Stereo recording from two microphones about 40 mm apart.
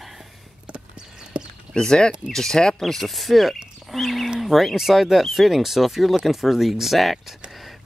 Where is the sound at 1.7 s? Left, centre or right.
Centre.